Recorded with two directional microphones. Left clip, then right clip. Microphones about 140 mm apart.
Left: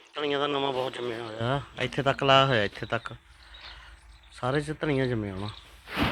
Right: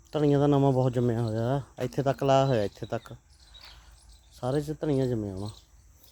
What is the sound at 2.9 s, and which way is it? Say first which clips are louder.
Speech: left 4 dB; 25° right (ahead or behind).